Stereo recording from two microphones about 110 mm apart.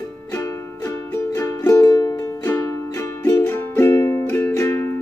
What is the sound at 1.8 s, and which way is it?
Music, 30° left (ahead or behind).